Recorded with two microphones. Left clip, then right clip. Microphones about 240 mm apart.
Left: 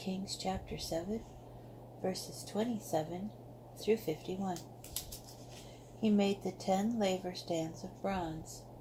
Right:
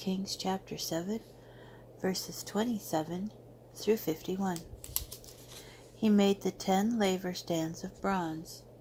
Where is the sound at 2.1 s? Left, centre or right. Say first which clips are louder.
Right 4 dB; right.